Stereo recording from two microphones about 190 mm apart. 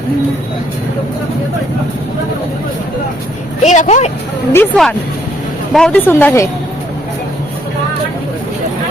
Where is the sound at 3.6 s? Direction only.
35° left (ahead or behind).